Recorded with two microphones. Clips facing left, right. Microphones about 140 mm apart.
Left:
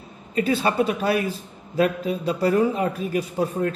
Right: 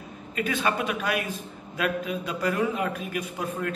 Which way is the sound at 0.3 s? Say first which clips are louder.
Left 5 dB; 30° left (ahead or behind).